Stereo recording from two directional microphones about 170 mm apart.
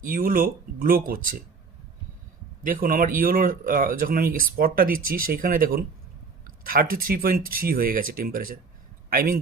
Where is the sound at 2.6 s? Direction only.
55° right (ahead or behind).